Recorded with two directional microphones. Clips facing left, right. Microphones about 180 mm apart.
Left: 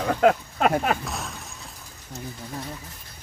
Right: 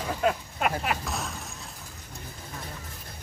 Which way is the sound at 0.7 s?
45° left (ahead or behind).